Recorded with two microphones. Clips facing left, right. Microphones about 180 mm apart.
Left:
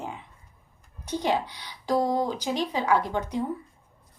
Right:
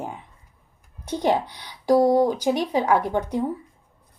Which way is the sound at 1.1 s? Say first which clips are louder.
Right 4 dB; 50° right (ahead or behind).